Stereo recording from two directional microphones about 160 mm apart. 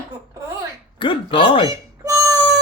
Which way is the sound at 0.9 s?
30° left (ahead or behind).